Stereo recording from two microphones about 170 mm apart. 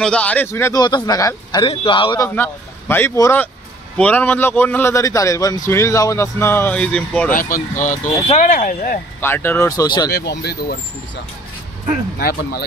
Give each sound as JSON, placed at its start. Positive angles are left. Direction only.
{"t": 0.0, "sound": "speech", "side_deg": 5}
{"t": 2.2, "sound": "speech", "side_deg": 10}
{"t": 7.3, "sound": "speech", "side_deg": 55}
{"t": 9.2, "sound": "speech", "side_deg": 15}
{"t": 10.1, "sound": "speech", "side_deg": 70}
{"t": 12.2, "sound": "speech", "side_deg": 60}